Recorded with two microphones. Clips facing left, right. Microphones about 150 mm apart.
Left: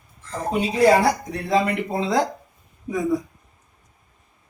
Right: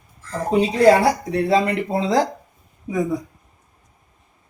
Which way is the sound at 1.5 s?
35° right (ahead or behind).